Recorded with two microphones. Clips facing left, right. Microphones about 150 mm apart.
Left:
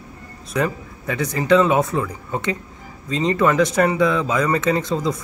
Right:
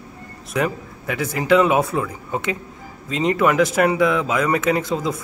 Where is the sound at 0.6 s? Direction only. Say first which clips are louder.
Even; 10° right (ahead or behind).